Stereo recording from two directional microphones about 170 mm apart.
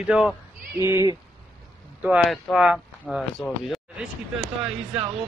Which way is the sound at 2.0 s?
5° right (ahead or behind).